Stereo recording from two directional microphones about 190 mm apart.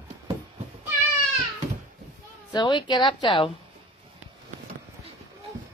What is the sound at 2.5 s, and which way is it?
A woman's voice, 20° left (ahead or behind).